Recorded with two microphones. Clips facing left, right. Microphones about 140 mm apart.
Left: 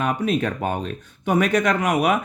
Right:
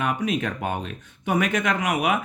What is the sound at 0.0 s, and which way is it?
Speech, 35° left (ahead or behind).